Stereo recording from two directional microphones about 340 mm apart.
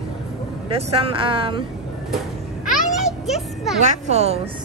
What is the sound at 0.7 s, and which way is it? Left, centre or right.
Speech, centre.